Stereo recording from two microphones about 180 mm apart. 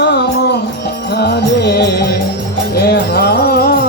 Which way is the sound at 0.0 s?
70° left (ahead or behind).